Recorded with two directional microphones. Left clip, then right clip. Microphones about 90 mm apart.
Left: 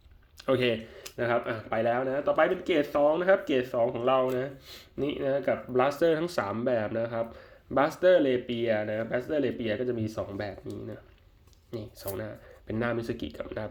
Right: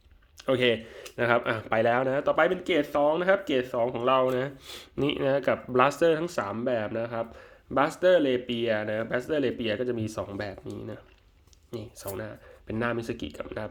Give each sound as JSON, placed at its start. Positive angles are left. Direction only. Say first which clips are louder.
{"t": 0.4, "sound": "speech", "louder": "right 2 dB", "side_deg": -20}
{"t": 1.1, "sound": "speech", "louder": "right 4 dB", "side_deg": -65}
{"t": 2.6, "sound": "speech", "louder": "even", "side_deg": -25}
{"t": 3.8, "sound": "speech", "louder": "right 3 dB", "side_deg": -30}
{"t": 4.6, "sound": "speech", "louder": "right 3 dB", "side_deg": -75}
{"t": 6.1, "sound": "speech", "louder": "even", "side_deg": -5}